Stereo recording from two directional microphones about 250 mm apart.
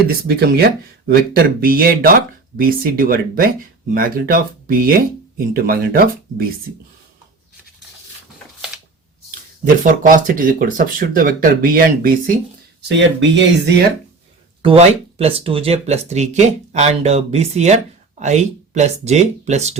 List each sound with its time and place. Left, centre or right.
0.3 s speech: right
9.8 s speech: right
13.0 s speech: right
14.6 s speech: right